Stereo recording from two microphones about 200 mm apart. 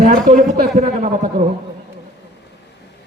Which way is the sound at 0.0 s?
40° right (ahead or behind).